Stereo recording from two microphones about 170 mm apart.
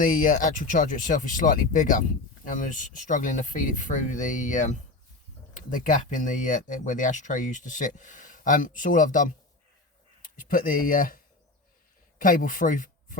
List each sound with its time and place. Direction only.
0.0 s speech: 55° left (ahead or behind)
12.2 s speech: 55° left (ahead or behind)